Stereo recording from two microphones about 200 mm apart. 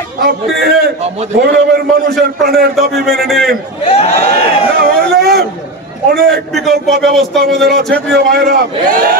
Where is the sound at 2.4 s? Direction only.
50° right (ahead or behind).